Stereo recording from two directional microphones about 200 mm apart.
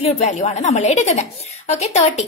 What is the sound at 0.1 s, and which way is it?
A woman's voice, 35° left (ahead or behind).